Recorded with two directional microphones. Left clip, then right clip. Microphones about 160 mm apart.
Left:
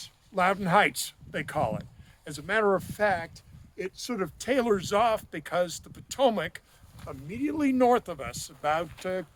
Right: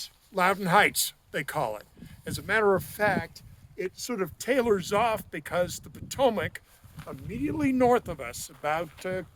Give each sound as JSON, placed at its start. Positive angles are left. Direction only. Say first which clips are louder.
{"t": 0.0, "sound": "speech", "louder": "right 1 dB", "side_deg": -70}
{"t": 1.8, "sound": "speech", "louder": "right 4 dB", "side_deg": -50}
{"t": 3.8, "sound": "speech", "louder": "right 1 dB", "side_deg": -30}